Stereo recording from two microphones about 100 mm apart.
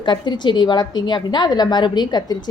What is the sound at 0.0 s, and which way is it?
A woman's voice, 50° left (ahead or behind).